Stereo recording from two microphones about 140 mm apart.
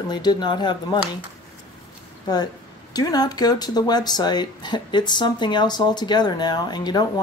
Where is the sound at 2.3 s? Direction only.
30° left (ahead or behind).